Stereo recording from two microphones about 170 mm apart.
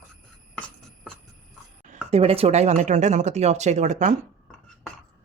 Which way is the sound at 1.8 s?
45° right (ahead or behind).